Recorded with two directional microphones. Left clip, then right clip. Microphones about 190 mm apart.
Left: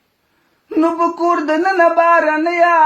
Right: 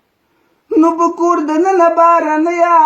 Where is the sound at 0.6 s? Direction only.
15° left (ahead or behind).